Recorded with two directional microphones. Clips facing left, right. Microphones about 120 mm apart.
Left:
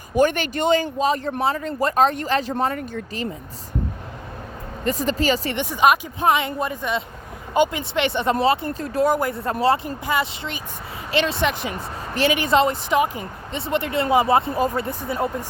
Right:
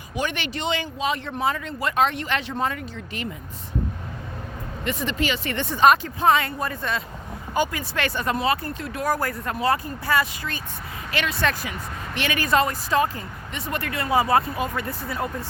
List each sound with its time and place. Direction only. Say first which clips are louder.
0.2 s speech: left 9 dB; 45° left (ahead or behind)
4.8 s speech: left 4 dB; 40° left (ahead or behind)
5.5 s speech: right 3 dB; 15° left (ahead or behind); by 9.0 s 35° left (ahead or behind)
9.0 s speech: left 1 dB; 20° left (ahead or behind); by 12.3 s 35° left (ahead or behind)
12.3 s speech: left 2 dB; 25° left (ahead or behind)
14.5 s speech: left 5 dB; 35° left (ahead or behind)
14.8 s speech: left 4 dB; 25° left (ahead or behind)